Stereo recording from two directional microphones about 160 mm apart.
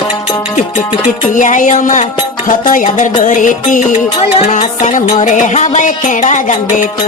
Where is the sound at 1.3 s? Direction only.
55° left (ahead or behind).